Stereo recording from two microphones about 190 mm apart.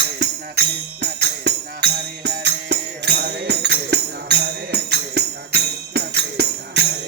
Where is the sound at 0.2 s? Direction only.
60° right (ahead or behind).